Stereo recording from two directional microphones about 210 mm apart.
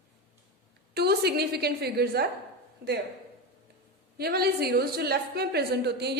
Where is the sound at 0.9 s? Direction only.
50° right (ahead or behind).